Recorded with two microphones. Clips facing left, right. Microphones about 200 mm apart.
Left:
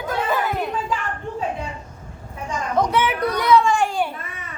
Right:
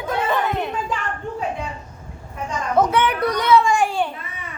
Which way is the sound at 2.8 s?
Centre (ahead or behind).